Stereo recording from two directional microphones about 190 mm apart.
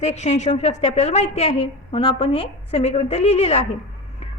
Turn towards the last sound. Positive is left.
turn(degrees=35)  # may be behind; listen again after turning